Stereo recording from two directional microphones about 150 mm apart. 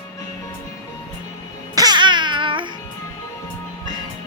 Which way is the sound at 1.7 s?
25° right (ahead or behind).